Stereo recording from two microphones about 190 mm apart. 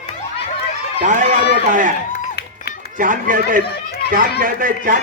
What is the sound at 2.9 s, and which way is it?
A man's voice, 45° right (ahead or behind).